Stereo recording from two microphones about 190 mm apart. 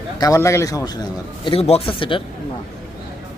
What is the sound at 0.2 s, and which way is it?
Speech, 15° left (ahead or behind).